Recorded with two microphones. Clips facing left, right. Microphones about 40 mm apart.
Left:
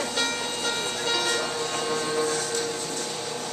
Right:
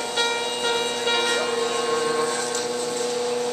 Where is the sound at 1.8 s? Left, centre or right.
Centre.